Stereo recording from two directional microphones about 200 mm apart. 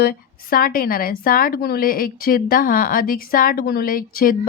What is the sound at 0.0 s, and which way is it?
A woman's voice, 50° left (ahead or behind).